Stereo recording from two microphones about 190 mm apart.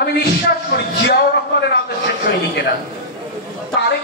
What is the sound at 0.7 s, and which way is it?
Speech, 60° left (ahead or behind).